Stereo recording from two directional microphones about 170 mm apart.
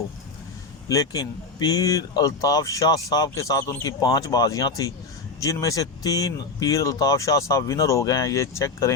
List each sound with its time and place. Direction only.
0.9 s speech: 20° left (ahead or behind)